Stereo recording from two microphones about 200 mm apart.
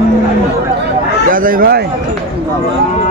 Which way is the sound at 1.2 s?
45° right (ahead or behind).